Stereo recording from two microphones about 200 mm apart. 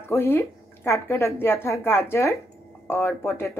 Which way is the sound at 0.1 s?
10° left (ahead or behind).